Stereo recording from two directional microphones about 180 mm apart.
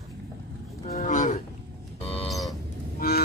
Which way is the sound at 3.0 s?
55° left (ahead or behind).